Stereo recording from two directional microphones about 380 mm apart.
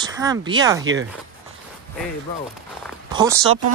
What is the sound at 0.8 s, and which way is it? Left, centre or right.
Speech, right.